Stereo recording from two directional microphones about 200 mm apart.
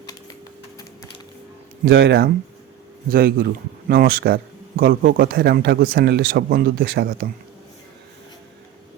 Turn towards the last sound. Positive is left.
turn(degrees=-50)  # may be behind; listen again after turning